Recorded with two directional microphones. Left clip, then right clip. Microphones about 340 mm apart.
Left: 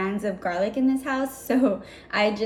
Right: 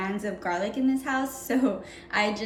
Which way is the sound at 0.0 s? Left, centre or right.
Centre.